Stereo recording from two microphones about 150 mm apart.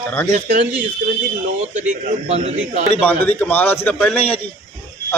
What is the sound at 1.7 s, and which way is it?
A man's voice, 50° right (ahead or behind).